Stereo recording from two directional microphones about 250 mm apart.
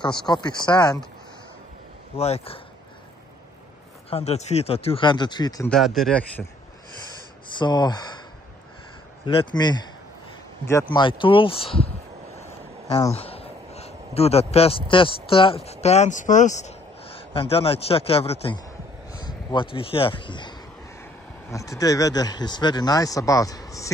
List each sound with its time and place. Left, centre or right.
0.3 s speech: centre
2.1 s speech: left
4.1 s speech: left
5.7 s speech: centre
7.5 s speech: centre
9.2 s speech: left
12.4 s a sound: centre
13.1 s a man's voice: left